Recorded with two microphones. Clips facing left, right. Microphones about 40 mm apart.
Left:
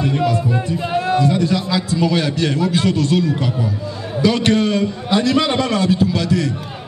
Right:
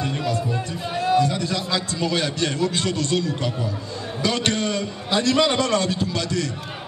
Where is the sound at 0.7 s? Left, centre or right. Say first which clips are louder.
Even; centre.